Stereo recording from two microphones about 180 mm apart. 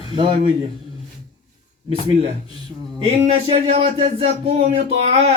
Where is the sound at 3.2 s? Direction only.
35° right (ahead or behind).